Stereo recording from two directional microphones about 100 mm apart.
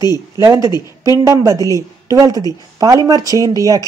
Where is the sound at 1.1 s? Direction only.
30° right (ahead or behind).